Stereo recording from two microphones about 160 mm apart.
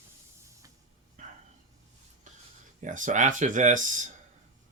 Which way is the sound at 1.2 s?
55° right (ahead or behind).